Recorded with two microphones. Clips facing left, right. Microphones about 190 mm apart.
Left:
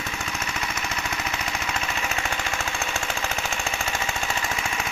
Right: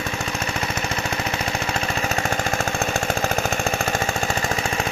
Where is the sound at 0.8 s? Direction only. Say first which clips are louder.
Right 5 dB; 35° right (ahead or behind).